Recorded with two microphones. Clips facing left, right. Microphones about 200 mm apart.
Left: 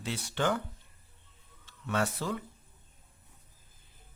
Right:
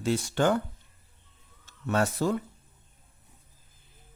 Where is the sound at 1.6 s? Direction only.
45° right (ahead or behind).